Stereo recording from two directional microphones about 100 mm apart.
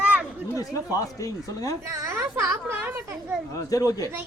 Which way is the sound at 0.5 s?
35° left (ahead or behind).